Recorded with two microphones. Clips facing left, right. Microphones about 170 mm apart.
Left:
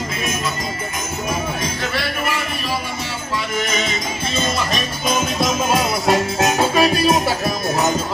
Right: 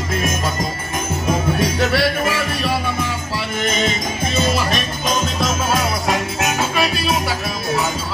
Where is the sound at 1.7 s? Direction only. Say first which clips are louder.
Right 6 dB; 85° right.